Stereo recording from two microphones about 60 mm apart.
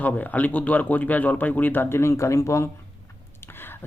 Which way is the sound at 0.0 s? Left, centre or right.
Left.